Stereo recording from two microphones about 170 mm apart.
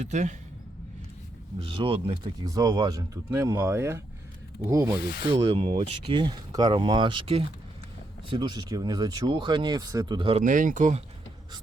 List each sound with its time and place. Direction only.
0.0 s speech: 45° right (ahead or behind)
1.5 s speech: 30° right (ahead or behind)
5.3 s speech: 30° right (ahead or behind)
10.4 s speech: 50° right (ahead or behind)